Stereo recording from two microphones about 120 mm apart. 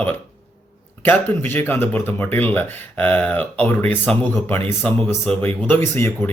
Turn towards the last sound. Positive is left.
turn(degrees=20)  # may be behind; listen again after turning